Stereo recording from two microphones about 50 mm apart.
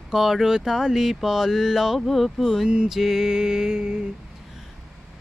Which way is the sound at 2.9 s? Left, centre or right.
Centre.